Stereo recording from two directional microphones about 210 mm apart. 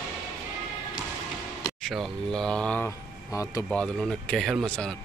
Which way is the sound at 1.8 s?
Centre (ahead or behind).